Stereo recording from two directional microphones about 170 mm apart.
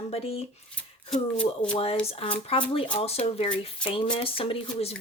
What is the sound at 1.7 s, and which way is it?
Speech, 35° left (ahead or behind).